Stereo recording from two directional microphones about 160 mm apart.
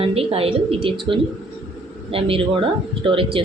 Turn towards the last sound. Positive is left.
turn(degrees=-35)  # may be behind; listen again after turning